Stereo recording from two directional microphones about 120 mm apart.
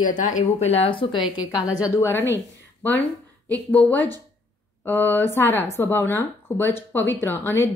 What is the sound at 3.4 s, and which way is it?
A woman's voice, 10° left (ahead or behind).